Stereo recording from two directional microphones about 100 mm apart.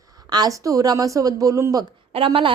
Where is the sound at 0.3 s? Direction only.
40° right (ahead or behind).